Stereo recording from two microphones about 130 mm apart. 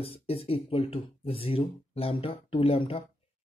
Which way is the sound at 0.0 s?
50° left (ahead or behind).